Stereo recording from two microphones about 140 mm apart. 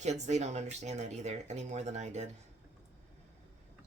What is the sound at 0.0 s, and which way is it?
Speech, 55° right (ahead or behind).